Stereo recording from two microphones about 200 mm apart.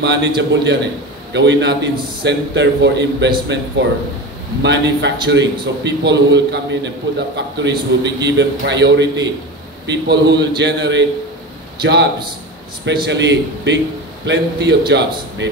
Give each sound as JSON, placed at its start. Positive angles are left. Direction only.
{"t": 0.0, "sound": "a man's voice", "side_deg": -60}